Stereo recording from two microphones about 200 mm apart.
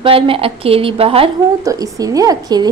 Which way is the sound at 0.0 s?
25° right (ahead or behind).